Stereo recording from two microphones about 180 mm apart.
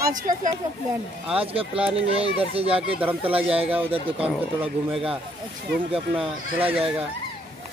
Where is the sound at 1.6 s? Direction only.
5° right (ahead or behind).